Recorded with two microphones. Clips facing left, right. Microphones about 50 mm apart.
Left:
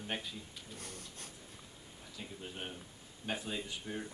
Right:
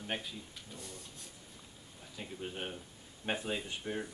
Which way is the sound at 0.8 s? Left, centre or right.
Left.